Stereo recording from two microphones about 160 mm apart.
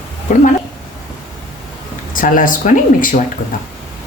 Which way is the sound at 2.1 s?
60° left (ahead or behind).